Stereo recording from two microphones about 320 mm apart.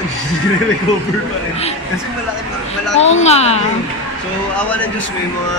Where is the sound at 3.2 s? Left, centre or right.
Centre.